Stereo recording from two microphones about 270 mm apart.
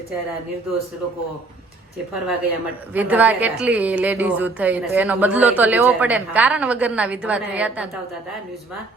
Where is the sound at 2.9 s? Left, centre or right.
Centre.